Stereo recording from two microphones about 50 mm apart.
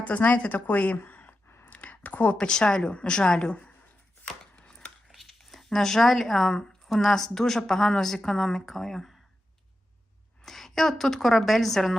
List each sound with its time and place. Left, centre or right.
0.0 s a woman's voice: left
1.7 s a sound: left
2.3 s speech: centre
5.1 s speech: centre
10.4 s a woman's voice: centre